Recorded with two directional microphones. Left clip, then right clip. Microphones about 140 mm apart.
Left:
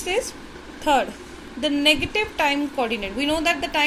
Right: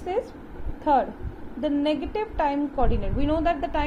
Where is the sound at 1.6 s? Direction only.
20° left (ahead or behind).